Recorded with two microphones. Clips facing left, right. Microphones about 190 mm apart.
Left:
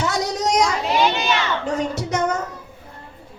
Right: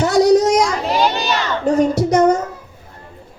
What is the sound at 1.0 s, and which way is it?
Crowd, 40° right (ahead or behind).